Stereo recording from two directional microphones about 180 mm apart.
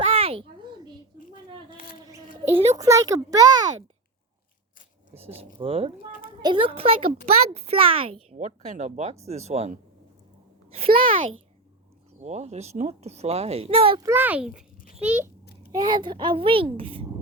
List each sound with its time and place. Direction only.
0.0 s a sound: 30° right (ahead or behind)
1.8 s mouse: 55° left (ahead or behind)
2.7 s a child's voice: 15° right (ahead or behind)
5.1 s a child's voice: 35° right (ahead or behind)
12.2 s a child's voice: 40° right (ahead or behind)
14.0 s a child's voice: 10° right (ahead or behind)
15.7 s a child's voice: 25° right (ahead or behind)